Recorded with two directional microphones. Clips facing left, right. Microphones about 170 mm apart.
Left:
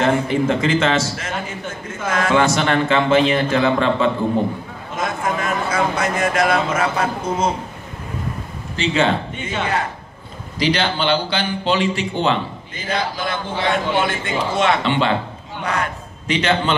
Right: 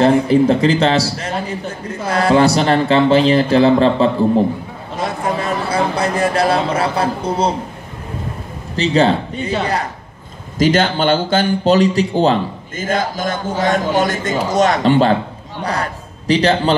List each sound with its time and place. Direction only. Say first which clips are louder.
0.0 s a man's voice: right 6 dB; 35° right (ahead or behind)
4.9 s a sound: right 2 dB; 35° right (ahead or behind)
8.7 s a man's voice: right 4 dB; 40° right (ahead or behind)